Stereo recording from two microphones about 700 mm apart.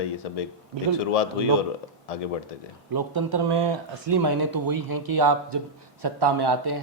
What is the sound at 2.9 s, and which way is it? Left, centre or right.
Speech, right.